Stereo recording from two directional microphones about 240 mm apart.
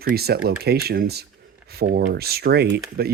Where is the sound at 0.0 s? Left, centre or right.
Right.